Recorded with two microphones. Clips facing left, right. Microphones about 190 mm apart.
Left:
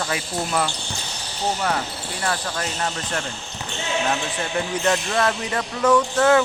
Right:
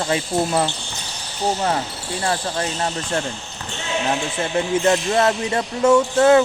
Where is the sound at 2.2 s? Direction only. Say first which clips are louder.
Right 3 dB; 25° right (ahead or behind).